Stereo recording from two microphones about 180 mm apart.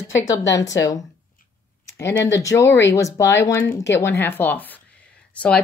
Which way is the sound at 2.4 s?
20° left (ahead or behind).